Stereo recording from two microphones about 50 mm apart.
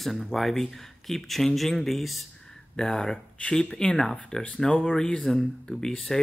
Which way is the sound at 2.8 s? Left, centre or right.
Centre.